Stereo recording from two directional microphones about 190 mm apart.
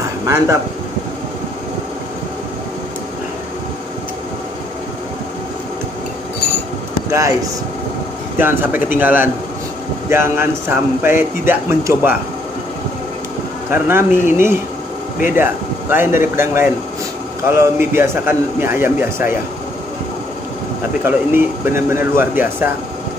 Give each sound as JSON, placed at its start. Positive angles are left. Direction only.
{"t": 7.1, "sound": "speech", "side_deg": -15}
{"t": 8.4, "sound": "speech", "side_deg": -10}
{"t": 13.7, "sound": "speech", "side_deg": -10}
{"t": 21.0, "sound": "speech", "side_deg": -10}